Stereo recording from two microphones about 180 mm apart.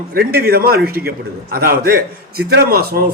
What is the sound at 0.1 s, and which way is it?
A man's voice, 60° right (ahead or behind).